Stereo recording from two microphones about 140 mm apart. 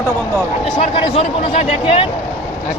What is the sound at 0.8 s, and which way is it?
A man's voice, 45° left (ahead or behind).